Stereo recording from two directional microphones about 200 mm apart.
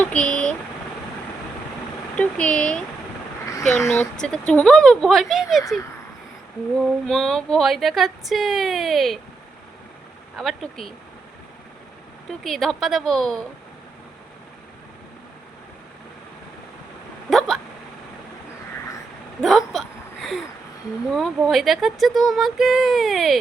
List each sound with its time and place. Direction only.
0.0 s vehicle: 5° left (ahead or behind)
2.1 s speech: 5° left (ahead or behind)
6.7 s speech: centre (ahead or behind)
10.3 s speech: centre (ahead or behind)
12.4 s speech: centre (ahead or behind)
17.2 s hiccup: centre (ahead or behind)
19.4 s speech: centre (ahead or behind)
21.1 s speech: centre (ahead or behind)